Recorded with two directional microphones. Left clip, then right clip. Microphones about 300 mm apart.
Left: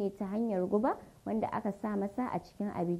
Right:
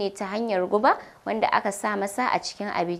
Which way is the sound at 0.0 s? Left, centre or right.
Centre.